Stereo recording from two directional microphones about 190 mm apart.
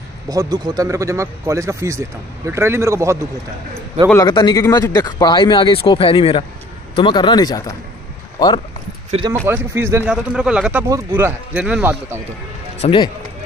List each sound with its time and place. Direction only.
0.3 s a man's voice: 20° right (ahead or behind)
4.3 s speech: 20° left (ahead or behind)
9.1 s speech: 35° right (ahead or behind)
9.5 s a man's voice: 10° right (ahead or behind)
12.8 s speech: 25° left (ahead or behind)